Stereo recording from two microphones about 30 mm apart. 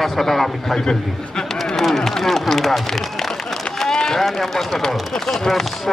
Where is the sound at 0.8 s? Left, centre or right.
Left.